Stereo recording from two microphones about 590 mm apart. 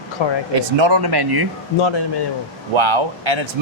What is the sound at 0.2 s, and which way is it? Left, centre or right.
Speech, left.